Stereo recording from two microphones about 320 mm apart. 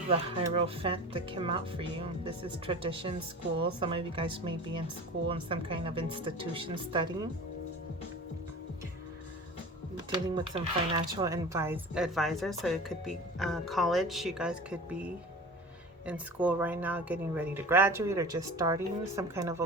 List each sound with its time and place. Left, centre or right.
0.1 s a woman's voice: centre
10.3 s a woman's voice: centre